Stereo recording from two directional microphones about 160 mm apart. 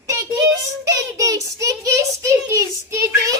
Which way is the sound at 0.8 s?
20° right (ahead or behind).